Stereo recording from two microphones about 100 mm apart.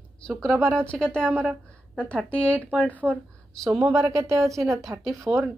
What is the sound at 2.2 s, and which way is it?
Speech, 15° left (ahead or behind).